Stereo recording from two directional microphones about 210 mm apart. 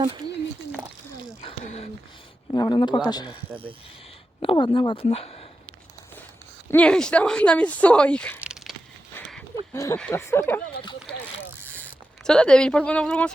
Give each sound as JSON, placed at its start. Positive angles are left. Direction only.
{"t": 1.4, "sound": "a sound", "side_deg": 30}
{"t": 2.5, "sound": "speech", "side_deg": 20}
{"t": 3.5, "sound": "speech", "side_deg": -25}
{"t": 4.4, "sound": "speech", "side_deg": 20}
{"t": 6.7, "sound": "speech", "side_deg": 5}
{"t": 8.4, "sound": "a sound", "side_deg": -5}
{"t": 9.7, "sound": "speech", "side_deg": 15}
{"t": 11.8, "sound": "speech", "side_deg": 5}